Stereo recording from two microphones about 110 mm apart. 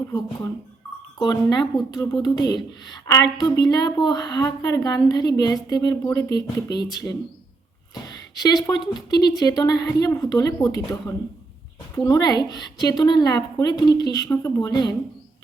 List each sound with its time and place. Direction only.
0.1 s a woman's voice: 35° left (ahead or behind)
8.0 s a woman's voice: 35° left (ahead or behind)